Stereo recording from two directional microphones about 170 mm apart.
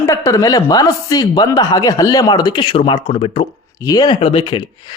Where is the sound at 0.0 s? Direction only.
15° left (ahead or behind).